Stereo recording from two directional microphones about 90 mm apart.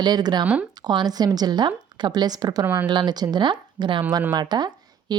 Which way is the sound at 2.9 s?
55° right (ahead or behind).